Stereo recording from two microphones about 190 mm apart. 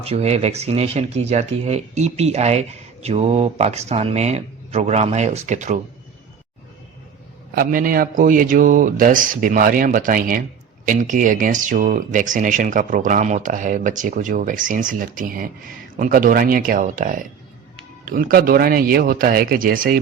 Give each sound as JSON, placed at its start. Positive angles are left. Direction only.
{"t": 0.0, "sound": "speech", "side_deg": -35}
{"t": 7.5, "sound": "speech", "side_deg": -50}